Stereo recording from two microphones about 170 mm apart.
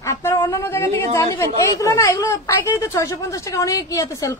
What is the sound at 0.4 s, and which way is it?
A woman's voice, 20° left (ahead or behind).